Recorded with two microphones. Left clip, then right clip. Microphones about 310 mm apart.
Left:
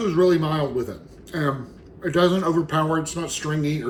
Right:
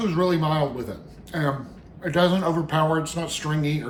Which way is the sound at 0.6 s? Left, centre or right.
Right.